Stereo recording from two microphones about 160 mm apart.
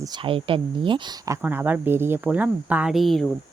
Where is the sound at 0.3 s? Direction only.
35° right (ahead or behind).